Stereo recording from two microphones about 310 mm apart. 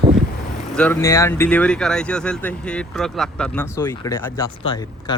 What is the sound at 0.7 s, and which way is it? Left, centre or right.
Speech, centre.